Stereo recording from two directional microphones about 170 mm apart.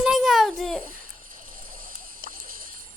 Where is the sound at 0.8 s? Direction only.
55° right (ahead or behind).